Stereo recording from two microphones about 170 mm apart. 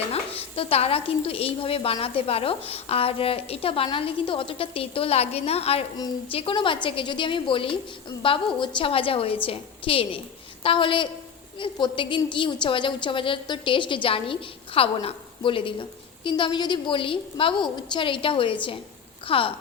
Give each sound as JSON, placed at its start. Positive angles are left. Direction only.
{"t": 0.1, "sound": "a woman's voice", "side_deg": 35}